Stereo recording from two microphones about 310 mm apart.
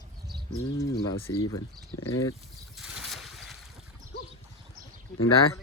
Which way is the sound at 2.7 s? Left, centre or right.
Centre.